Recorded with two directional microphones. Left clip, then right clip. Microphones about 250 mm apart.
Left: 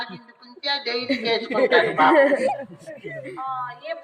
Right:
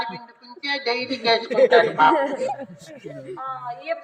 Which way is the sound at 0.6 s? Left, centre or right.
Right.